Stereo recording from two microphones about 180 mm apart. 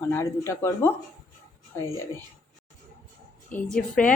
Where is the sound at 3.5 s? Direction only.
5° left (ahead or behind).